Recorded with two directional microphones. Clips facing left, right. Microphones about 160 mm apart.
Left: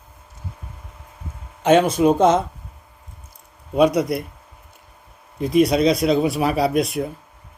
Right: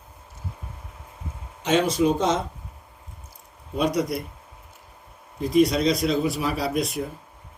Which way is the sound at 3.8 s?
65° left (ahead or behind).